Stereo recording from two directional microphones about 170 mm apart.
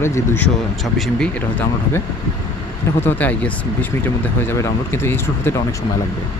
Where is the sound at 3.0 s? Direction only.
10° left (ahead or behind).